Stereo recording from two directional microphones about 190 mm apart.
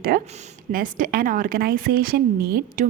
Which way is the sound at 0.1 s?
50° right (ahead or behind).